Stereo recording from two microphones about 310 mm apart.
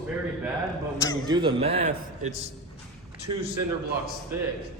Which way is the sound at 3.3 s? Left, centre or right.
Right.